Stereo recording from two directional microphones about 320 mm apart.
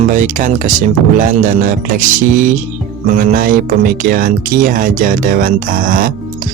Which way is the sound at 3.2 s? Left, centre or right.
Right.